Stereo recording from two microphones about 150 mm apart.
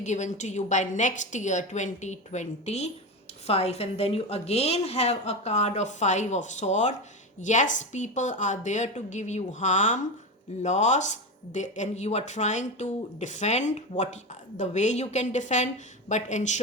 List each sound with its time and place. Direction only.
0.0 s speech: 50° left (ahead or behind)